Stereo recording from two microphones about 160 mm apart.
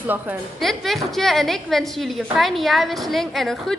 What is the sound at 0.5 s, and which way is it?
A woman's voice, centre (ahead or behind).